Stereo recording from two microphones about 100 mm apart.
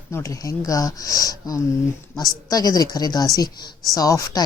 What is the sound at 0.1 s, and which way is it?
Speech, 30° left (ahead or behind).